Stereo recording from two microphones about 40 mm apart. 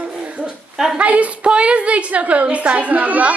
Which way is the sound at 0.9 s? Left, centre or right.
Right.